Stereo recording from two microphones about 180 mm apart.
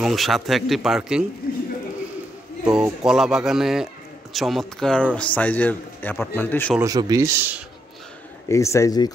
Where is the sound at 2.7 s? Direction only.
5° right (ahead or behind).